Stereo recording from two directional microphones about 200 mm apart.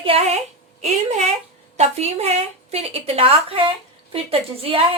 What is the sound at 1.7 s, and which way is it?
A woman's voice, 35° right (ahead or behind).